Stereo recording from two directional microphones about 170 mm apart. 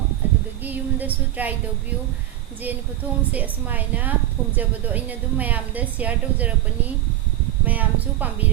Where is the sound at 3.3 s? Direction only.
10° right (ahead or behind).